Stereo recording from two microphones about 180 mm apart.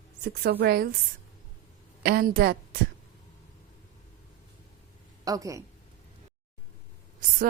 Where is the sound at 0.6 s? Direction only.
60° right (ahead or behind).